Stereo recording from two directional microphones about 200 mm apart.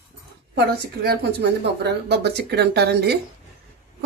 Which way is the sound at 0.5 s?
50° right (ahead or behind).